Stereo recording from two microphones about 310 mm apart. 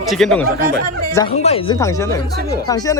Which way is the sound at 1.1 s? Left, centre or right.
Centre.